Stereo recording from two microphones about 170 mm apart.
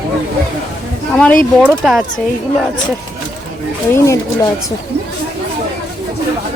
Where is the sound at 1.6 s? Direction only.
Centre (ahead or behind).